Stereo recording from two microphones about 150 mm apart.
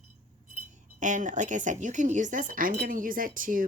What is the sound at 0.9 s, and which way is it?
Speech, 55° right (ahead or behind).